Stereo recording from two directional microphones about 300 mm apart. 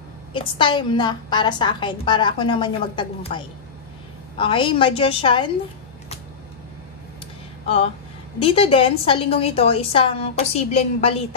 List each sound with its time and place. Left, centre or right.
0.3 s a woman's voice: centre
7.6 s a woman's voice: centre